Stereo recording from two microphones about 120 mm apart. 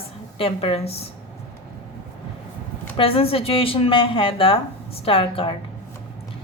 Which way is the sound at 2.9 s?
50° left (ahead or behind).